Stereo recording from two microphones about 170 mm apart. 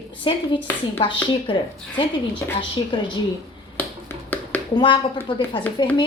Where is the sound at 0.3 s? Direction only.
30° left (ahead or behind).